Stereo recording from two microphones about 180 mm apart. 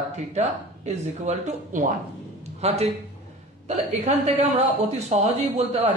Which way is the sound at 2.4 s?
35° right (ahead or behind).